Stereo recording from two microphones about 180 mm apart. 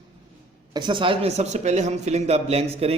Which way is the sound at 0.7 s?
25° right (ahead or behind).